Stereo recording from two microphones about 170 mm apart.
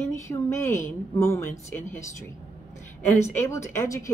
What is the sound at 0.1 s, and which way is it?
Speech, 15° left (ahead or behind).